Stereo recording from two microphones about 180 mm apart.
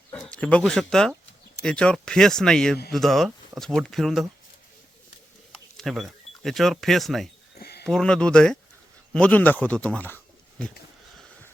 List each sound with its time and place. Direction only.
0.1 s speech: 5° left (ahead or behind)
5.7 s speech: centre (ahead or behind)
7.6 s a sound: 60° left (ahead or behind)
7.9 s speech: 5° left (ahead or behind)